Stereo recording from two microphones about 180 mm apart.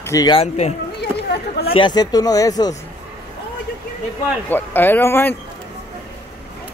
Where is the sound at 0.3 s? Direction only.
35° left (ahead or behind).